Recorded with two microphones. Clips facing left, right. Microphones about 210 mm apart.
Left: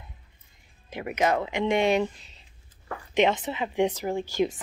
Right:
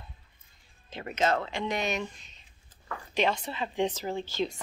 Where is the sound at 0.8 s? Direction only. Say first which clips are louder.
Left 3 dB; 15° left (ahead or behind); by 2.4 s 30° left (ahead or behind).